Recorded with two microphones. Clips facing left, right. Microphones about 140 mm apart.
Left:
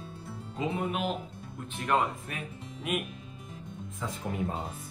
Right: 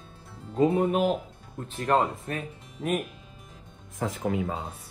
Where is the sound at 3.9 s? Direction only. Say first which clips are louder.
Right 8 dB; 90° right.